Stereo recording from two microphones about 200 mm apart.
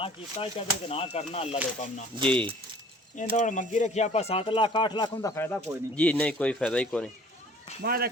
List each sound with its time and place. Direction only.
0.0 s speech: 30° left (ahead or behind)
2.2 s speech: 5° left (ahead or behind)
3.2 s speech: 40° left (ahead or behind); by 7.1 s 5° left (ahead or behind)
7.8 s speech: 50° right (ahead or behind)